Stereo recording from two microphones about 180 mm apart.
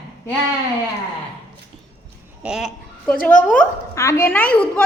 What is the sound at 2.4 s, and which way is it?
Speech, 5° right (ahead or behind).